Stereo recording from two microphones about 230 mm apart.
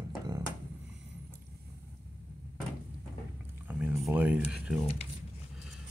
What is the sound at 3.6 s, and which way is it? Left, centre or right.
Speech, centre.